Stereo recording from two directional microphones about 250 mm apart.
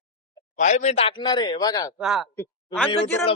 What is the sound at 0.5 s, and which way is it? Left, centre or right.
Speech, left.